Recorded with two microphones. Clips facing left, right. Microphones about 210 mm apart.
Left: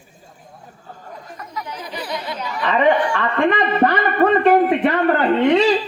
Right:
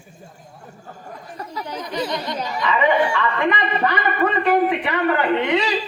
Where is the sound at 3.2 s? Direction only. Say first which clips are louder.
Left 3 dB; 50° left (ahead or behind).